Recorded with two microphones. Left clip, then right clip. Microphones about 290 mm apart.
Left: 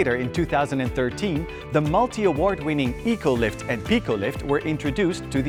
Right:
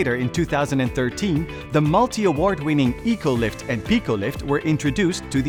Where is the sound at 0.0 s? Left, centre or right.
Right.